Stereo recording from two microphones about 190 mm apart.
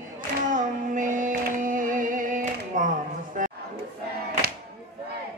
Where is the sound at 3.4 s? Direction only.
45° right (ahead or behind).